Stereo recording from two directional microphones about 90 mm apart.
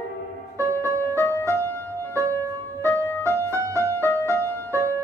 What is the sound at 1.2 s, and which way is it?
Music, 30° left (ahead or behind).